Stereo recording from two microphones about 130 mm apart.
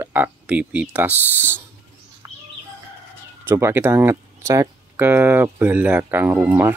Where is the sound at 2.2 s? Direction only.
25° right (ahead or behind).